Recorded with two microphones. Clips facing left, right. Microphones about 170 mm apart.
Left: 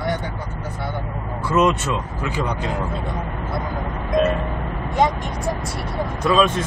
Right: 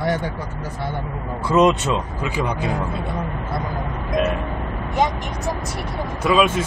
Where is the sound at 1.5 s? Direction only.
20° right (ahead or behind).